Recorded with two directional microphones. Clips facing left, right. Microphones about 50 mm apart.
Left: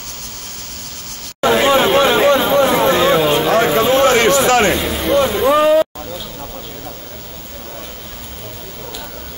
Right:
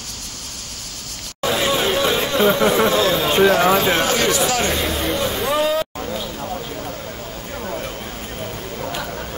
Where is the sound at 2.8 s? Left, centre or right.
Left.